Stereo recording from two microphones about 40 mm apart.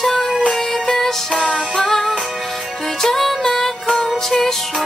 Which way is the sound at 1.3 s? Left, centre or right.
Left.